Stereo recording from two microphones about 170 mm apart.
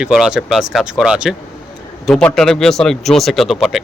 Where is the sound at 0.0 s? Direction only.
5° right (ahead or behind).